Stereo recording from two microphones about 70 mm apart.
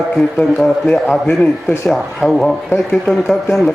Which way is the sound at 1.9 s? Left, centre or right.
Centre.